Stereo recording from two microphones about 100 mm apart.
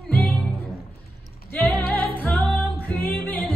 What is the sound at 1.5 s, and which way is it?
Music, 20° left (ahead or behind).